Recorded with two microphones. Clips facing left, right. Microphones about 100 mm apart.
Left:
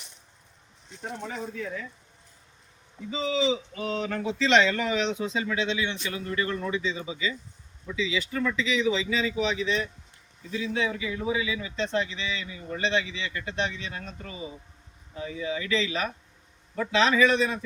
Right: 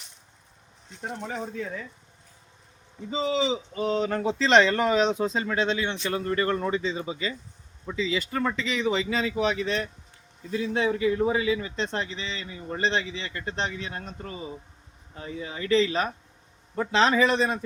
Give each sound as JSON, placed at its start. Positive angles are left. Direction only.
{"t": 3.1, "sound": "speech", "side_deg": -35}